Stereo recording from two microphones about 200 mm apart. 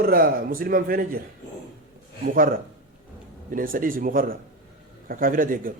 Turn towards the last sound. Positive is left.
turn(degrees=-45)  # may be behind; listen again after turning